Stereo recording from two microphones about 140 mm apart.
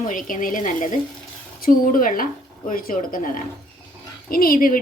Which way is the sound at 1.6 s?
85° left.